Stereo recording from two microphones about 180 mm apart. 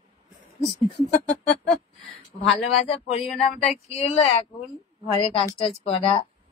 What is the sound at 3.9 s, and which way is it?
Speech, 35° left (ahead or behind).